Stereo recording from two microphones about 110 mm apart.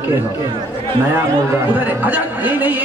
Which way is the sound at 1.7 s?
15° right (ahead or behind).